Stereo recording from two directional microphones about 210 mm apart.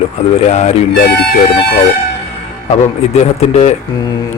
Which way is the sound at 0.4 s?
30° left (ahead or behind).